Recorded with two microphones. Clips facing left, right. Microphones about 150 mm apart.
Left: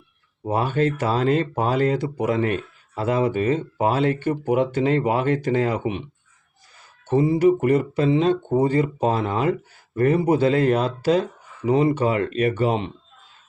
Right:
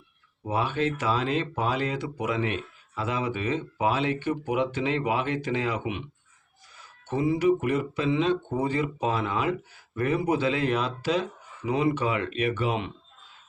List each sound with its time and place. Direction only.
0.4 s speech: 45° left (ahead or behind)
7.1 s speech: 40° left (ahead or behind)